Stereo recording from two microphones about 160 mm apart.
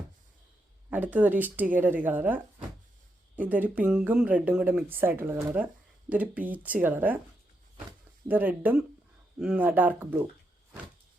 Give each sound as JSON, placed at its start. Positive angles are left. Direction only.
{"t": 0.9, "sound": "speech", "side_deg": -10}
{"t": 8.3, "sound": "speech", "side_deg": -10}